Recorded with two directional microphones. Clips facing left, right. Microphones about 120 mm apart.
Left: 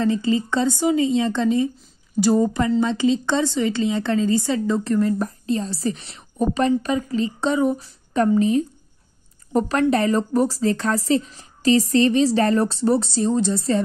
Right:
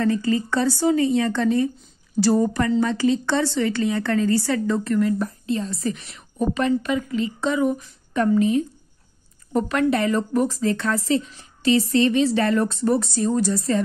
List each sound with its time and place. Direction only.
0.0 s a woman's voice: 20° left (ahead or behind)
4.8 s speech: 35° left (ahead or behind)